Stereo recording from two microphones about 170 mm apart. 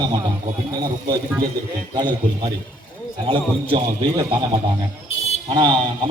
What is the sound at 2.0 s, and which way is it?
A man's voice, 25° right (ahead or behind).